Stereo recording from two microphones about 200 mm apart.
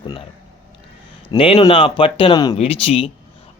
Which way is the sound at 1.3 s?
25° left (ahead or behind).